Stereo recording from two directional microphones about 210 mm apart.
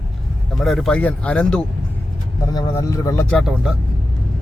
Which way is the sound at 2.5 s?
15° left (ahead or behind).